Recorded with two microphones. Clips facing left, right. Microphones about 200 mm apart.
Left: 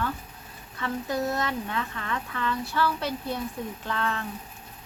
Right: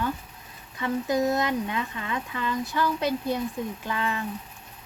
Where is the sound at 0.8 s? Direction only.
15° right (ahead or behind).